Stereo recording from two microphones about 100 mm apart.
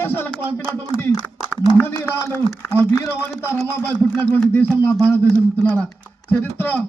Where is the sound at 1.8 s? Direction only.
20° left (ahead or behind).